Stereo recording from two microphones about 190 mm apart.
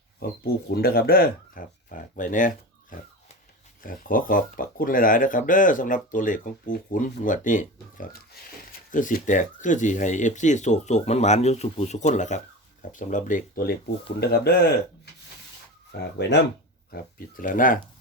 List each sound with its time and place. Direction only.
0.2 s speech: 55° left (ahead or behind)
16.9 s speech: 50° left (ahead or behind)